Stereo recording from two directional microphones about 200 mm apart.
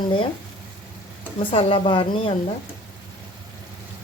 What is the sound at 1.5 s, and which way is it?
Speech, 25° left (ahead or behind).